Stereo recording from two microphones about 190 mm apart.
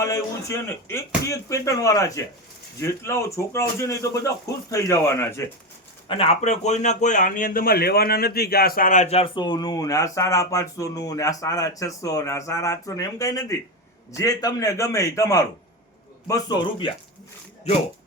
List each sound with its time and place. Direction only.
0.0 s speech: 15° left (ahead or behind)
6.1 s speech: 30° left (ahead or behind)